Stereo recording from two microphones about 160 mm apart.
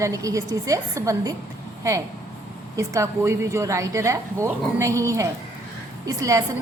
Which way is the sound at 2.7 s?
20° right (ahead or behind).